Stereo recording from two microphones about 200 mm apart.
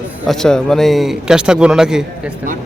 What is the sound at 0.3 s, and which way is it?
A man's voice, 5° left (ahead or behind).